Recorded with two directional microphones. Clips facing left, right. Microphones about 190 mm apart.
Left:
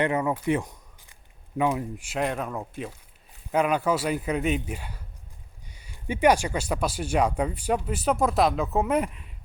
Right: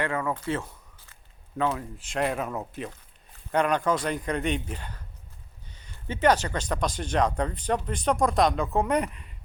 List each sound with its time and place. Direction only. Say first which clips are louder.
0.0 s speech: left 4 dB; 20° left (ahead or behind)
0.3 s a sound: left 5 dB; 15° left (ahead or behind)
1.5 s speech: left 3 dB; 15° left (ahead or behind)
2.1 s speech: right 1 dB; centre (ahead or behind)